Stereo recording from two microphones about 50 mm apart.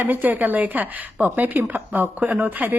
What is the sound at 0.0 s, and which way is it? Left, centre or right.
A woman's voice, right.